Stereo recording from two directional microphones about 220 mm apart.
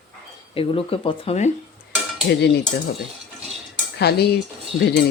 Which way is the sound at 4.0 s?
45° left (ahead or behind).